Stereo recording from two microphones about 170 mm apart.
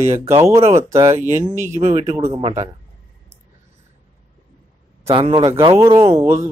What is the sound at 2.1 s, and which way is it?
Speech, 20° right (ahead or behind).